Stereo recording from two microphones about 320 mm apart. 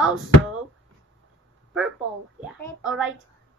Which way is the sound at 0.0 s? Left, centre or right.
Centre.